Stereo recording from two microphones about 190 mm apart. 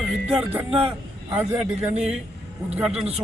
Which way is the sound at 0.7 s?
30° right (ahead or behind).